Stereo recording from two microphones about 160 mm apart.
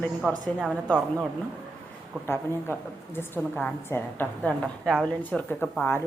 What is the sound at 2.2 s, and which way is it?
A woman's voice, 15° left (ahead or behind).